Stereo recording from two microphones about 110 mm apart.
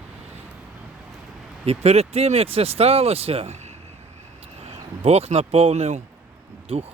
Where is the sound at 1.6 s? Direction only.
65° right (ahead or behind).